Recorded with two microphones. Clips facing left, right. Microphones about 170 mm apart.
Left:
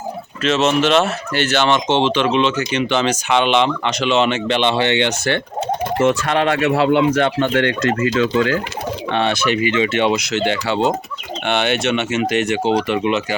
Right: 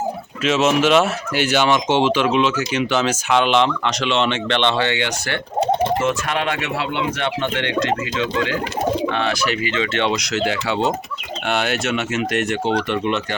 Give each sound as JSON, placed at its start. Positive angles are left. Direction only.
{"t": 0.4, "sound": "speech", "side_deg": -5}
{"t": 4.9, "sound": "speech", "side_deg": 25}
{"t": 9.1, "sound": "speech", "side_deg": 25}
{"t": 10.3, "sound": "speech", "side_deg": 0}